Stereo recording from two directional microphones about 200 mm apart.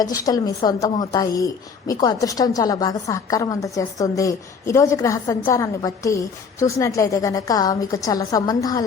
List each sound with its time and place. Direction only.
0.3 s a woman's voice: 20° left (ahead or behind)